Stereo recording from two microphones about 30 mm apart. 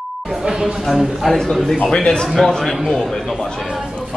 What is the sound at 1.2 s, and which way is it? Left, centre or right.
Speech, centre.